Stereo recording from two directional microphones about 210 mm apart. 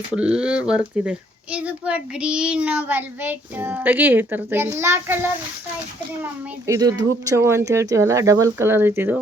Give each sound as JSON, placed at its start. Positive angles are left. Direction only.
{"t": 0.1, "sound": "a child's voice", "side_deg": -5}
{"t": 6.7, "sound": "a child's voice", "side_deg": -15}